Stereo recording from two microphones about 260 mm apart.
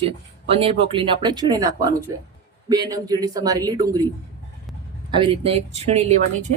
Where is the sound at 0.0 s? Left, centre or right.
Right.